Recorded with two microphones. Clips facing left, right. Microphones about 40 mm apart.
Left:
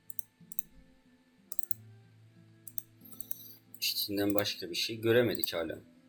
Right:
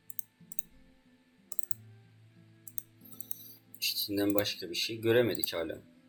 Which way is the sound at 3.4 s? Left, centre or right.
Centre.